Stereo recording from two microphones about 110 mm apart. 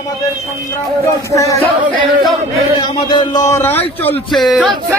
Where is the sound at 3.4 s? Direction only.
25° left (ahead or behind).